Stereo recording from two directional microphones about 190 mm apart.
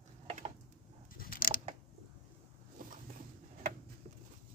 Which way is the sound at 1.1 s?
50° left (ahead or behind).